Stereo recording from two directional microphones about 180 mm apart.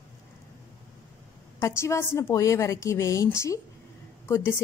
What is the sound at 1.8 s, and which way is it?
A woman's voice, 15° left (ahead or behind).